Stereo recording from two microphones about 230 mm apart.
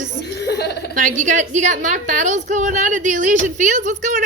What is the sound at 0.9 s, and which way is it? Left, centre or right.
A woman's voice, right.